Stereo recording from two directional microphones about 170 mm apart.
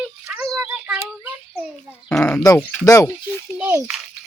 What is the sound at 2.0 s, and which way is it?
Speech, 5° left (ahead or behind).